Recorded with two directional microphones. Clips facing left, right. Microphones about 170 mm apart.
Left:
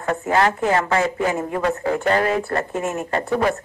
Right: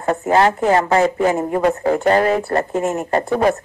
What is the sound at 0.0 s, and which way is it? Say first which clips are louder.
Speech: right 4 dB; 35° right (ahead or behind).